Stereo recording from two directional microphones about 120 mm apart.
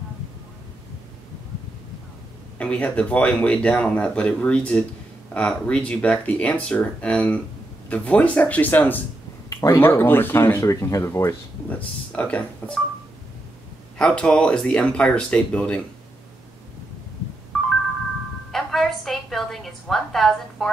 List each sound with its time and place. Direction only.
2.6 s speech: 10° left (ahead or behind)
12.1 s speech: 10° left (ahead or behind)
13.9 s speech: 5° left (ahead or behind)
17.5 s music: 5° left (ahead or behind)
18.5 s a sound: centre (ahead or behind)